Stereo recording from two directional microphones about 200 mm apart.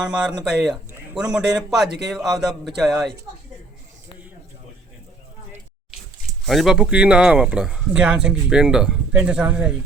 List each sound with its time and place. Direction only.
0.0 s speech: 5° right (ahead or behind)
6.4 s speech: centre (ahead or behind)